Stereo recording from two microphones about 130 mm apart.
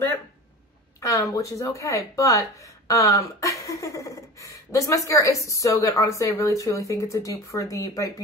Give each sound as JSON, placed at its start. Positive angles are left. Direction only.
{"t": 1.0, "sound": "speech", "side_deg": 25}